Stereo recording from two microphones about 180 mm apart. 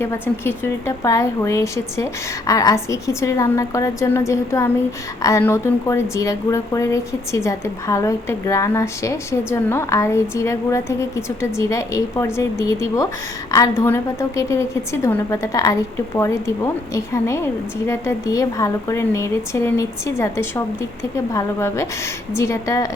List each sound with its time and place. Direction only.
0.0 s a woman's voice: 15° left (ahead or behind)